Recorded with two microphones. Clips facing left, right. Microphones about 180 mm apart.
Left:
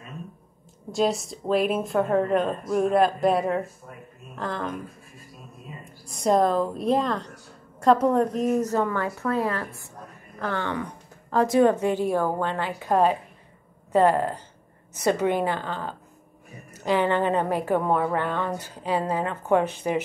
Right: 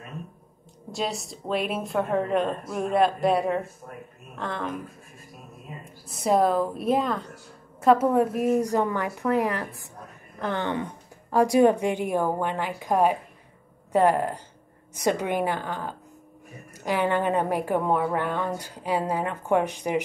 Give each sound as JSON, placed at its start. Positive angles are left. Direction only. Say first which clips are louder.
{"t": 0.9, "sound": "speech", "louder": "left 6 dB", "side_deg": 0}
{"t": 6.0, "sound": "a woman's voice", "louder": "left 1 dB", "side_deg": -5}